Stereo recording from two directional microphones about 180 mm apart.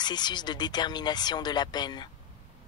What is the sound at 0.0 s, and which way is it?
Speech, 25° left (ahead or behind).